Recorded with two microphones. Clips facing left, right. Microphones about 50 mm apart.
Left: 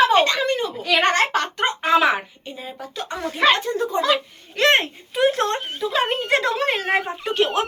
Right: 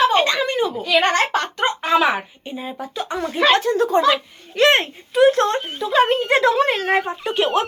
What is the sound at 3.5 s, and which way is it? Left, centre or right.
Speech, right.